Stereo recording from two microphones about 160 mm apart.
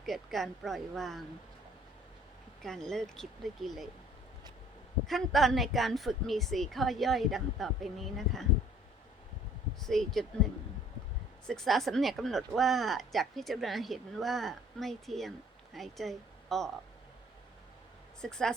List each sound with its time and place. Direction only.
0.0 s speech: centre (ahead or behind)
2.6 s speech: 5° left (ahead or behind)
5.0 s speech: centre (ahead or behind)
9.8 s speech: centre (ahead or behind)
11.4 s a woman's voice: centre (ahead or behind)
18.2 s speech: 5° left (ahead or behind)